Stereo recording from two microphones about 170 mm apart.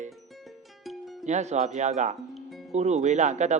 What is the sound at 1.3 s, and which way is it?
Speech, 40° right (ahead or behind).